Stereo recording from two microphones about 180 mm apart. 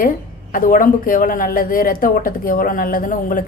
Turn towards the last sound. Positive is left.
turn(degrees=50)  # may be behind; listen again after turning